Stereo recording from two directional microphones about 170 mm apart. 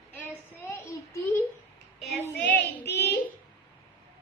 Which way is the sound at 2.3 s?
85° left.